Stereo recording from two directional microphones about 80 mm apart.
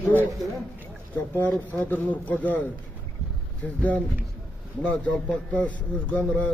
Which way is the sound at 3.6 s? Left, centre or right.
Centre.